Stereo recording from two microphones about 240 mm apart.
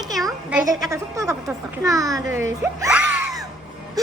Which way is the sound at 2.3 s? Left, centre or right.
Right.